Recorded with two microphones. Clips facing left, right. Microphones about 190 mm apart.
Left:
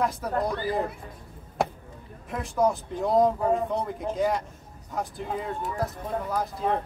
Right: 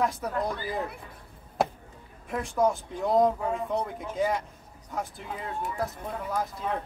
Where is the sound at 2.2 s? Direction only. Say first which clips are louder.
Left 1 dB; centre (ahead or behind).